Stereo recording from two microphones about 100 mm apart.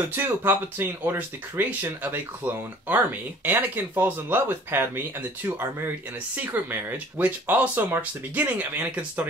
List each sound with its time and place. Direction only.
0.1 s speech: 20° right (ahead or behind)